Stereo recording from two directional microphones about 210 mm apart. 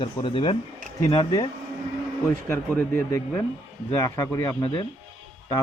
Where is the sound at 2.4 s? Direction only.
10° left (ahead or behind).